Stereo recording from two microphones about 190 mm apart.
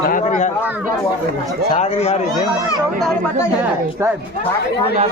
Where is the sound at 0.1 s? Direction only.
40° left (ahead or behind).